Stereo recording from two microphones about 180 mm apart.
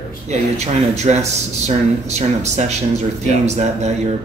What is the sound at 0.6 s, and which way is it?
Speech, 40° right (ahead or behind).